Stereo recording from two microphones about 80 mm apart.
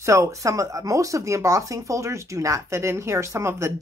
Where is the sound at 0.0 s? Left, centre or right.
Right.